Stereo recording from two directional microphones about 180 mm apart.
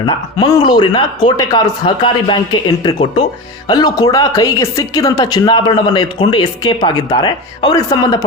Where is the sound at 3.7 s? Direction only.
20° left (ahead or behind).